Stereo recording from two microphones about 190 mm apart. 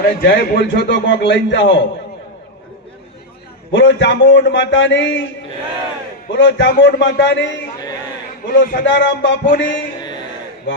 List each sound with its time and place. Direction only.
0.0 s a man's voice: 55° left (ahead or behind)
3.7 s a man's voice: 75° left (ahead or behind)
6.4 s a man's voice: 70° left (ahead or behind)
8.4 s a man's voice: 50° left (ahead or behind)
8.9 s a man's voice: 70° left (ahead or behind)
9.5 s a man's voice: 45° left (ahead or behind)
10.0 s a sound: 20° left (ahead or behind)